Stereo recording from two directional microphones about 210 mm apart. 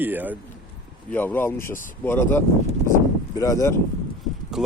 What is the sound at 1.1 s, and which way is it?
Speech, 10° left (ahead or behind).